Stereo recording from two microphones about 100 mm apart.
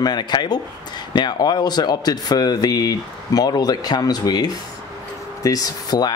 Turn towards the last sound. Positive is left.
turn(degrees=40)  # may be behind; listen again after turning